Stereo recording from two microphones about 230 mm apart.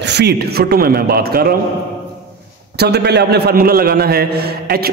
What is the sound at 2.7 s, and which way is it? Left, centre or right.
A man's voice, right.